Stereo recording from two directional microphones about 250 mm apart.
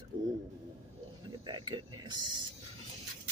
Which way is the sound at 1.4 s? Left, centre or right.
Centre.